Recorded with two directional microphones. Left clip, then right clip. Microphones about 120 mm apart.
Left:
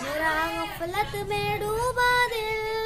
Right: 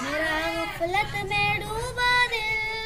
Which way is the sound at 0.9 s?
45° left (ahead or behind).